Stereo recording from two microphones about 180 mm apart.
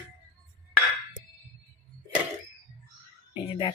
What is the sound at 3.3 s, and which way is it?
Speech, 30° left (ahead or behind).